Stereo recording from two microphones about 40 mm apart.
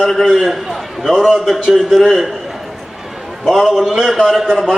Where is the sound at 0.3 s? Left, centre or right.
Centre.